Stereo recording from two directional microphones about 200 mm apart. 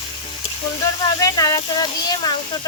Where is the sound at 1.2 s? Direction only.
20° left (ahead or behind).